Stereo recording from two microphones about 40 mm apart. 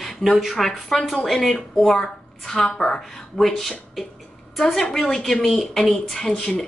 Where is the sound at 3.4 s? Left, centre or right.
Centre.